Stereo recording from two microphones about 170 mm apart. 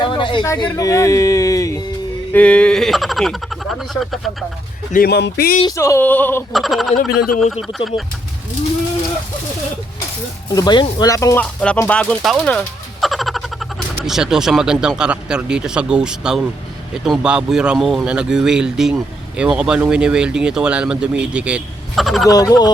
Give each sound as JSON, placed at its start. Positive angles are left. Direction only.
{"t": 0.0, "sound": "a sound", "side_deg": 30}
{"t": 0.6, "sound": "speech", "side_deg": 20}
{"t": 2.3, "sound": "speech", "side_deg": 5}
{"t": 4.9, "sound": "speech", "side_deg": 60}
{"t": 5.6, "sound": "speech", "side_deg": 15}
{"t": 6.5, "sound": "speech", "side_deg": 0}
{"t": 10.5, "sound": "speech", "side_deg": 25}
{"t": 11.6, "sound": "speech", "side_deg": 5}
{"t": 22.3, "sound": "speech", "side_deg": 20}